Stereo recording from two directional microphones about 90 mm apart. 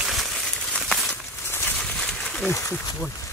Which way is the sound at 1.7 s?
10° left (ahead or behind).